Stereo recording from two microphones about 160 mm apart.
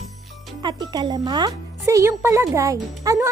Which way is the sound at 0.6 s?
25° right (ahead or behind).